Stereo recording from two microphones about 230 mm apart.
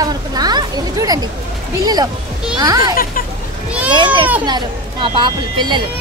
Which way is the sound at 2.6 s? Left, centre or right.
Centre.